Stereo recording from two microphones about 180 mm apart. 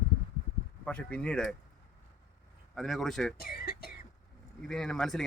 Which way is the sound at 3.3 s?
60° left (ahead or behind).